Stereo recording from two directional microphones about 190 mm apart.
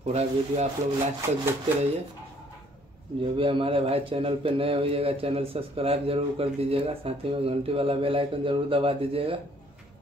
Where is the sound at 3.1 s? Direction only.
25° right (ahead or behind).